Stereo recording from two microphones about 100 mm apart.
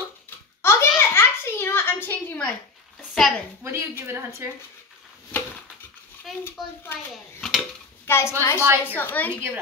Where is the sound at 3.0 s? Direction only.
Centre (ahead or behind).